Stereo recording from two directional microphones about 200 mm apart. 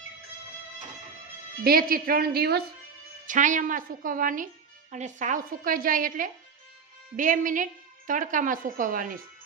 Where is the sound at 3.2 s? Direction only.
40° right (ahead or behind).